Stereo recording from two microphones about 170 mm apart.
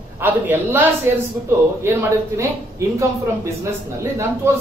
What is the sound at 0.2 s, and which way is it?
A man's voice, 10° right (ahead or behind).